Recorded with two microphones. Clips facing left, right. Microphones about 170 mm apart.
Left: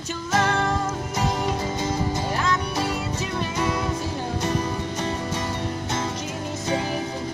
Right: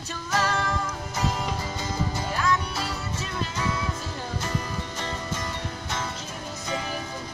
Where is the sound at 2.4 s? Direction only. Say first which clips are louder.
Left 2 dB; 20° left (ahead or behind).